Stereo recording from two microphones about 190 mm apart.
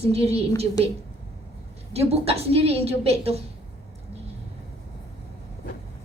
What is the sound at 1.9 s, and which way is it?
A woman's voice, 30° right (ahead or behind).